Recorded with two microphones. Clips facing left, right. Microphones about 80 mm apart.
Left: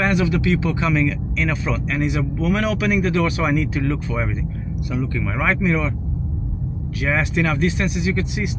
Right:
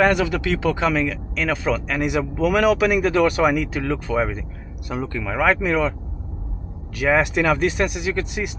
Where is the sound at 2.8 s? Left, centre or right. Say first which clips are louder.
Right 2 dB; right.